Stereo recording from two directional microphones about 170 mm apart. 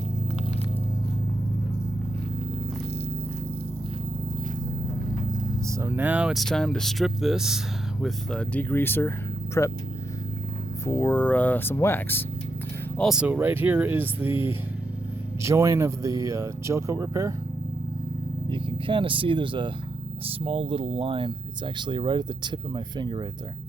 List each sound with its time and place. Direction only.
5.6 s speech: 15° right (ahead or behind); by 9.7 s 15° left (ahead or behind)
10.8 s speech: 10° left (ahead or behind)
13.0 s speech: 5° right (ahead or behind); by 17.3 s 20° right (ahead or behind)
18.4 s speech: 30° right (ahead or behind)